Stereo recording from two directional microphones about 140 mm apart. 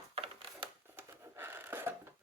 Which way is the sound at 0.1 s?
40° right (ahead or behind).